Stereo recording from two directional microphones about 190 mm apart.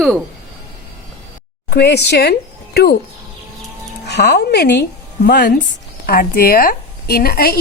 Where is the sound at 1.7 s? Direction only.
60° left (ahead or behind).